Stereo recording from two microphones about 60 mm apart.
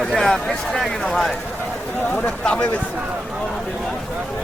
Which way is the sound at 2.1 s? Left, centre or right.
Centre.